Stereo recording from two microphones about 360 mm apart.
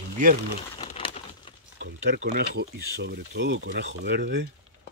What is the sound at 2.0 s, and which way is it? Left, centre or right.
Speech, right.